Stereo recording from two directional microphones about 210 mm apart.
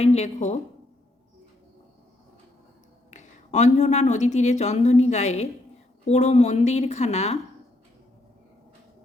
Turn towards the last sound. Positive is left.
turn(degrees=30)  # may be behind; listen again after turning